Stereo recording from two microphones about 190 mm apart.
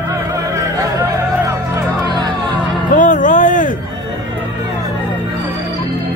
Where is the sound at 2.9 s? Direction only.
40° left (ahead or behind).